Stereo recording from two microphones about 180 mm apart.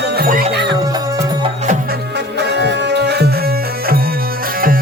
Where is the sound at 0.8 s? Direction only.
20° right (ahead or behind).